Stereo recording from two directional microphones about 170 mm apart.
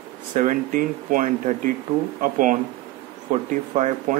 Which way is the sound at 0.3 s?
50° right (ahead or behind).